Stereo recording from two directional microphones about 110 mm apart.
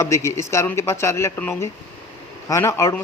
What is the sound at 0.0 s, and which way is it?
A man's voice, 25° left (ahead or behind).